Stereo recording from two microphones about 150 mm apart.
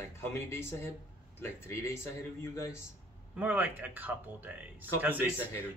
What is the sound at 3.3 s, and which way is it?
Speech, 10° right (ahead or behind).